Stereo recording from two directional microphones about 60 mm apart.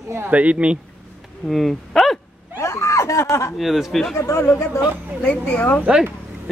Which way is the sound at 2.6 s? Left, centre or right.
Left.